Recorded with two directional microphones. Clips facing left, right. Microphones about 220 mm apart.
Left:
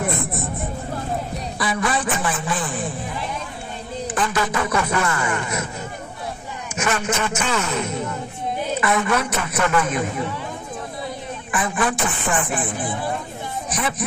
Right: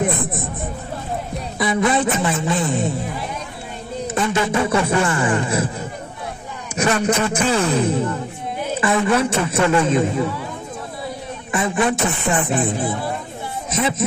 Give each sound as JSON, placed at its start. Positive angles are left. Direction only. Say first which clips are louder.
{"t": 0.0, "sound": "a sound", "louder": "right 3 dB", "side_deg": -20}
{"t": 1.6, "sound": "a man's voice", "louder": "right 6 dB", "side_deg": -20}
{"t": 4.1, "sound": "a man's voice", "louder": "right 4 dB", "side_deg": -25}
{"t": 11.5, "sound": "a man's voice", "louder": "right 4 dB", "side_deg": -25}